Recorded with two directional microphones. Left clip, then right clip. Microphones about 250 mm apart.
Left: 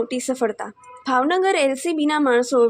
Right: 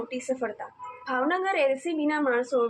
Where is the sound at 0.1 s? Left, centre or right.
Left.